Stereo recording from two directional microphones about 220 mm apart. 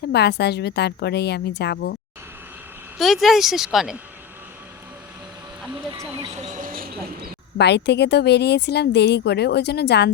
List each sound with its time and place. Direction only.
0.1 s a woman's voice: 50° left (ahead or behind)
3.0 s speech: centre (ahead or behind)
5.9 s speech: 15° right (ahead or behind)
6.4 s a sound: 35° right (ahead or behind)
7.6 s a woman's voice: 50° left (ahead or behind)